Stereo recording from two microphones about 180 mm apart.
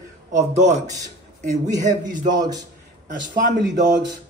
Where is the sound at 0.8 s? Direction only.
20° right (ahead or behind).